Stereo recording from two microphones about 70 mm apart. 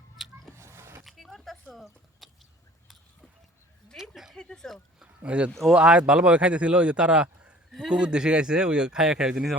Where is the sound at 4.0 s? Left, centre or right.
Centre.